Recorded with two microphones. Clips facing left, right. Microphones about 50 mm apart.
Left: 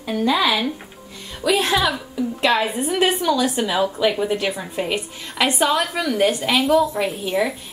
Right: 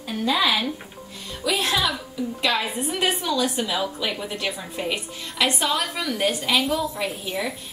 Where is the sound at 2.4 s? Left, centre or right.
Left.